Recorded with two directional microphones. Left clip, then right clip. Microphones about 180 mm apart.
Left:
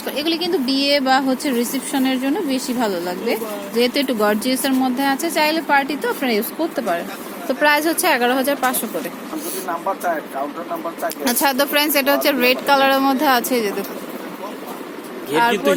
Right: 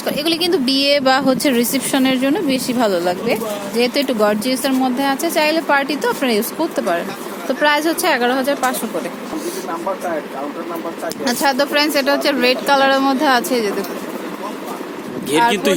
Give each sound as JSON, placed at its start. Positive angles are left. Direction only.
{"t": 0.0, "sound": "a woman's voice", "side_deg": -20}
{"t": 3.8, "sound": "speech", "side_deg": -5}
{"t": 7.4, "sound": "speech", "side_deg": 5}
{"t": 11.3, "sound": "speech", "side_deg": 15}